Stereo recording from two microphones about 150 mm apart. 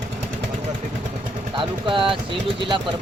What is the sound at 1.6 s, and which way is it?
Speech, 35° right (ahead or behind).